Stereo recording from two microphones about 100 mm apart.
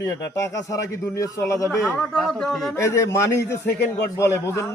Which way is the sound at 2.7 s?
30° left (ahead or behind).